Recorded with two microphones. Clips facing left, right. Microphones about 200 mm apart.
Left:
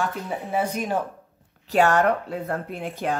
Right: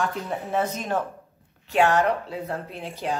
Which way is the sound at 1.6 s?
45° left (ahead or behind).